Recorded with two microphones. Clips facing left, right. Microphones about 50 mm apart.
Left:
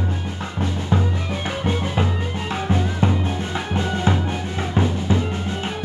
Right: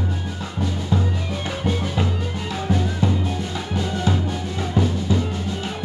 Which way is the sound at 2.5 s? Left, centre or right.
Left.